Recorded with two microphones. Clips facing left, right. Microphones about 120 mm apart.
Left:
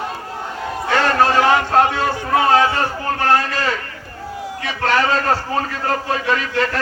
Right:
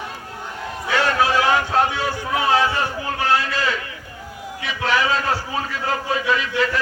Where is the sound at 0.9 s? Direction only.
55° left (ahead or behind).